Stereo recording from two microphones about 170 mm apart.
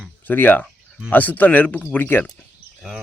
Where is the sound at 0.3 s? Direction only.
10° left (ahead or behind).